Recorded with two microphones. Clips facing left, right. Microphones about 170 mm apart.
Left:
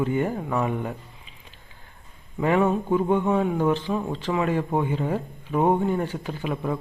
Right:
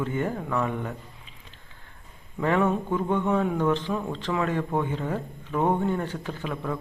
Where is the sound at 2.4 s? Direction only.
10° left (ahead or behind).